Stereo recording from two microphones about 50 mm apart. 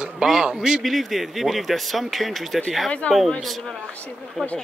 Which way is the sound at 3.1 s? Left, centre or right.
Left.